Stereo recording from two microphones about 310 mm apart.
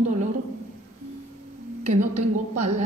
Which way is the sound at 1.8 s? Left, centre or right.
Right.